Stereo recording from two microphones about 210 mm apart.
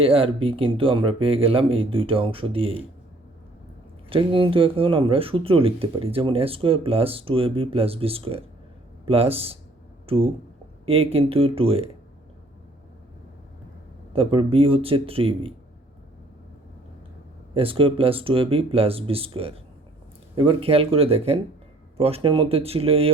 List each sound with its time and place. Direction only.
0.0 s speech: 25° right (ahead or behind)
4.1 s speech: 25° right (ahead or behind)
14.1 s speech: 25° right (ahead or behind)
17.5 s speech: 25° right (ahead or behind)